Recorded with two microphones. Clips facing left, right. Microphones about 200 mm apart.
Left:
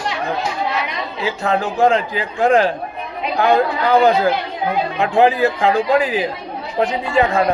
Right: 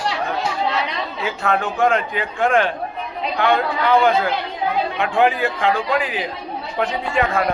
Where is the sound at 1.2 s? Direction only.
30° left (ahead or behind).